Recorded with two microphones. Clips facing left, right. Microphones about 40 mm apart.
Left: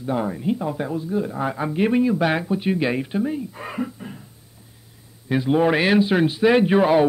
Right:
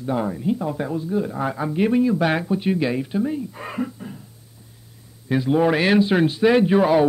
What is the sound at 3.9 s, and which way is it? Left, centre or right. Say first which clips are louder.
Cough: even; left.